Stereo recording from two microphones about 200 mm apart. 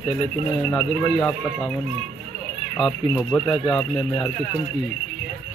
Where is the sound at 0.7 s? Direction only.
5° left (ahead or behind).